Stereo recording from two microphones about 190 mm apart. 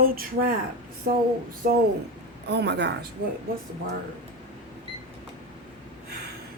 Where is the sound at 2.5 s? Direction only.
60° right (ahead or behind).